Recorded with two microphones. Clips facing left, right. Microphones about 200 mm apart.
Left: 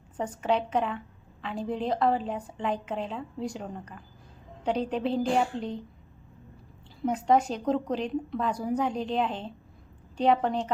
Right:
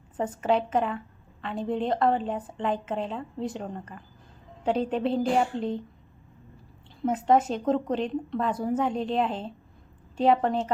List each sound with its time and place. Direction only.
0.2 s a woman's voice: centre (ahead or behind)
7.0 s a woman's voice: 5° right (ahead or behind)